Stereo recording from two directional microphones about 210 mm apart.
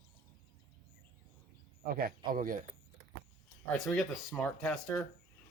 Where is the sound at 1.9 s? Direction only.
45° right (ahead or behind).